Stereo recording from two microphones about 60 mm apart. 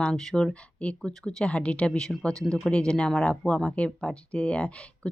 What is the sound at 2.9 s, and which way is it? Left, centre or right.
Speech, centre.